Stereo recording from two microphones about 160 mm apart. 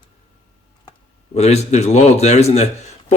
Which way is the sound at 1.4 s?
45° left (ahead or behind).